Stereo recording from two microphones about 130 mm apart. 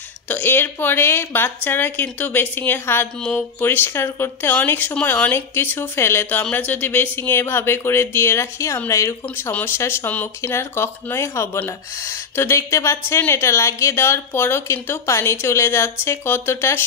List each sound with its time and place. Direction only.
0.3 s speech: 15° left (ahead or behind)